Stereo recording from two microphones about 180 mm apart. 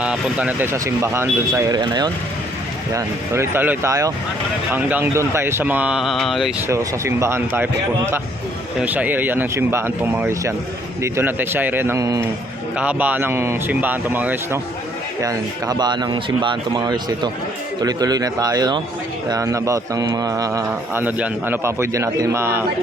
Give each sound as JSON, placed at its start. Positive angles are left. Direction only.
{"t": 0.0, "sound": "speech", "side_deg": -5}
{"t": 6.7, "sound": "speech", "side_deg": -15}
{"t": 12.7, "sound": "speech", "side_deg": -5}